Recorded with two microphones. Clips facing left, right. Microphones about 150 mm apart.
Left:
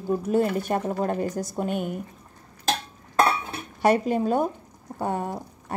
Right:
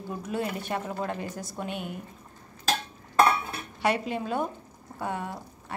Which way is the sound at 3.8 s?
45° left (ahead or behind).